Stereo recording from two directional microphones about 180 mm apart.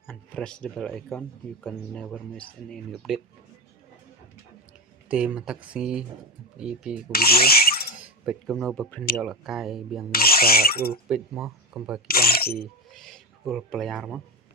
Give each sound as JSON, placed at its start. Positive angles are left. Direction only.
{"t": 0.1, "sound": "speech", "side_deg": 5}
{"t": 5.0, "sound": "speech", "side_deg": -5}
{"t": 7.1, "sound": "speech", "side_deg": 60}
{"t": 7.9, "sound": "speech", "side_deg": -5}
{"t": 10.1, "sound": "speech", "side_deg": 55}
{"t": 11.1, "sound": "speech", "side_deg": -5}
{"t": 12.0, "sound": "a sound", "side_deg": 55}
{"t": 12.5, "sound": "chink", "side_deg": 0}